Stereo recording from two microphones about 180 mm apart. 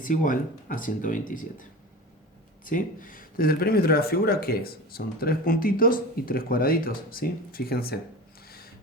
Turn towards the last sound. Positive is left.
turn(degrees=55)  # may be behind; listen again after turning